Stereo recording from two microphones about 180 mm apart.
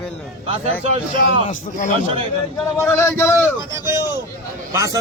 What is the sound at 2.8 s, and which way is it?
Speech, 15° left (ahead or behind).